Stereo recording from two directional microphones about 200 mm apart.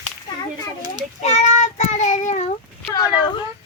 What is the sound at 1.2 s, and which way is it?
Child singing, 35° left (ahead or behind).